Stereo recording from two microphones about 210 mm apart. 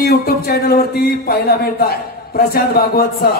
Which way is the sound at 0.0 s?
45° left (ahead or behind).